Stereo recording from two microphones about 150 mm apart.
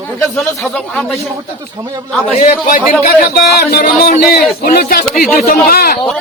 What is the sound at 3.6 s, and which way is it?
Music, 90° left.